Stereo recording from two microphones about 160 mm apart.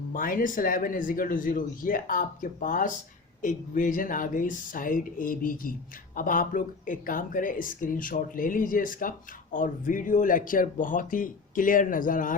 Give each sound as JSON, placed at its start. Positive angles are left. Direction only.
{"t": 0.1, "sound": "speech", "side_deg": 60}